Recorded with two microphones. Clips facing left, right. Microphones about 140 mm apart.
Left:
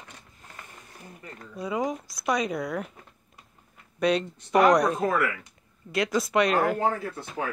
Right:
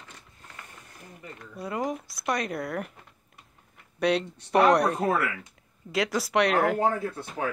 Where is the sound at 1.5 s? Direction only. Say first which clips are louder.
Left 2 dB; centre (ahead or behind).